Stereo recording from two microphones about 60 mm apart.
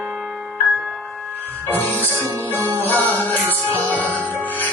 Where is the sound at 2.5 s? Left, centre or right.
Right.